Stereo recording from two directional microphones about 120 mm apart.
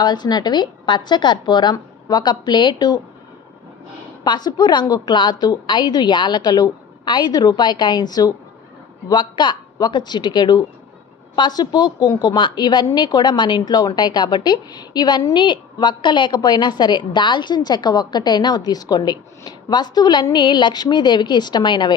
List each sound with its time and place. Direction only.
0.0 s a woman's voice: 35° left (ahead or behind)
4.2 s a woman's voice: 35° left (ahead or behind)